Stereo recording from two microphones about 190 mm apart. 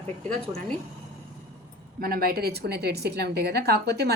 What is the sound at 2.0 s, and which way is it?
A woman's voice, 50° right (ahead or behind).